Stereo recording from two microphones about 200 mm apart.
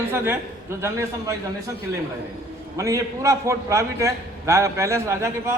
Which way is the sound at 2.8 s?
15° right (ahead or behind).